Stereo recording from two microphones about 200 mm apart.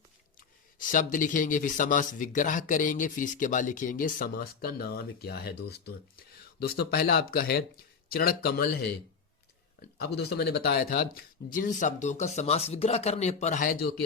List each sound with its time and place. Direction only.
0.8 s speech: 40° left (ahead or behind)
10.2 s speech: 55° left (ahead or behind); by 13.7 s 40° left (ahead or behind)